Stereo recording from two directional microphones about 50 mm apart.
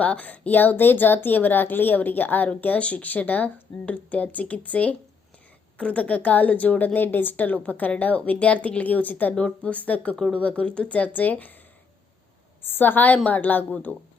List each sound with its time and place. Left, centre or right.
0.0 s a woman's voice: left
12.6 s a woman's voice: left